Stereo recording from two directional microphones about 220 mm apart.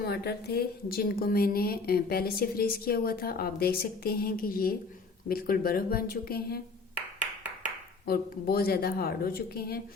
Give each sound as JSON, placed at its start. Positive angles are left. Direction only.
{"t": 0.0, "sound": "a woman's voice", "side_deg": 45}
{"t": 8.0, "sound": "a woman's voice", "side_deg": 45}